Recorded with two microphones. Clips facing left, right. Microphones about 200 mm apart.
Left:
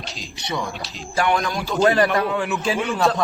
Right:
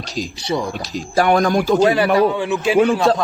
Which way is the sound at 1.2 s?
45° right (ahead or behind).